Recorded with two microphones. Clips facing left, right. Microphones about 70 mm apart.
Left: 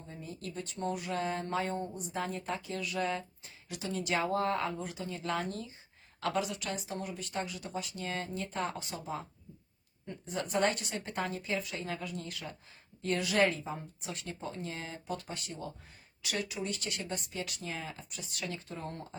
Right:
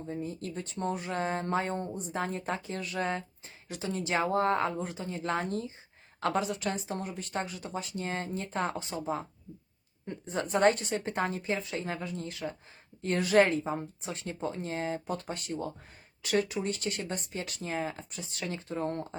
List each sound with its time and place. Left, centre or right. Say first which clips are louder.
0.2 s speech: right 5 dB; right